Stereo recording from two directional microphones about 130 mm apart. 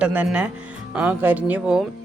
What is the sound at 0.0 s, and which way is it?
Speech, 10° right (ahead or behind).